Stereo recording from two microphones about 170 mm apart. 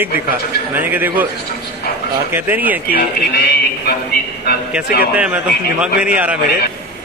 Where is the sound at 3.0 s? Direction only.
70° left (ahead or behind).